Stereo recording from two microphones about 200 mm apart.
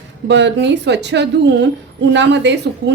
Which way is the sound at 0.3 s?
65° right (ahead or behind).